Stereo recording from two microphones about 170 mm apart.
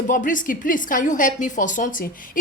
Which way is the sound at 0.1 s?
50° left (ahead or behind).